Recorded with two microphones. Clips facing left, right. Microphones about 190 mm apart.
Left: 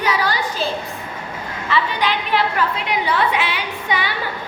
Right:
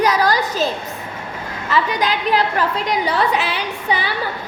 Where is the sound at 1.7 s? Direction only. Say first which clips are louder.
Right 1 dB; 40° right (ahead or behind).